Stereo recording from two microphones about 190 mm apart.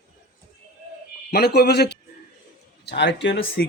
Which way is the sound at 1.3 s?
55° left (ahead or behind).